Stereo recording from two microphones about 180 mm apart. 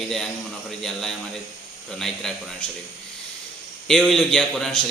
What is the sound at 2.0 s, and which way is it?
Speech, centre (ahead or behind).